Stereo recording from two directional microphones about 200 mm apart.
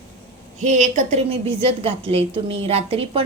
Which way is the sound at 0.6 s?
35° right (ahead or behind).